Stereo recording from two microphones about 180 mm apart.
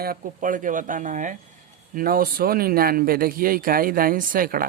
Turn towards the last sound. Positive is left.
turn(degrees=-50)  # may be behind; listen again after turning